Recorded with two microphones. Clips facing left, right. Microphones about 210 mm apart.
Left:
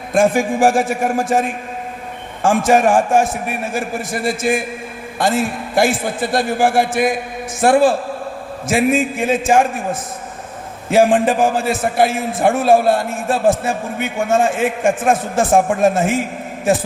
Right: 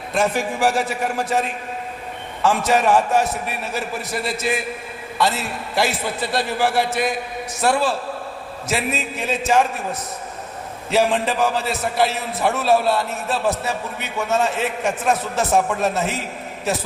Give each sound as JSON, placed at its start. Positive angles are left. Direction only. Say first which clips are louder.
{"t": 0.1, "sound": "a man's voice", "louder": "left 7 dB", "side_deg": 50}